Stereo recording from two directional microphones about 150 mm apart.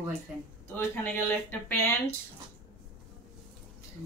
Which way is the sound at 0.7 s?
15° left (ahead or behind).